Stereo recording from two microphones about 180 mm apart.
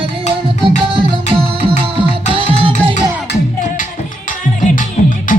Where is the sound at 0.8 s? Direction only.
25° right (ahead or behind).